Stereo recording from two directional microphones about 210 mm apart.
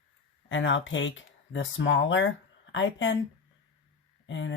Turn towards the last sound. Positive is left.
turn(degrees=60)  # may be behind; listen again after turning